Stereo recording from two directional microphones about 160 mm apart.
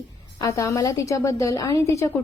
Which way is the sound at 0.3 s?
20° left (ahead or behind).